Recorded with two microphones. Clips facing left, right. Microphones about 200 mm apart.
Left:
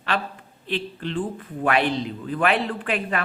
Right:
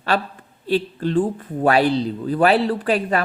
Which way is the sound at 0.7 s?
40° right (ahead or behind).